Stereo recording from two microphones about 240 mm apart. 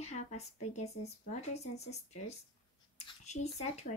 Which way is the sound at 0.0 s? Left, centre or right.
Left.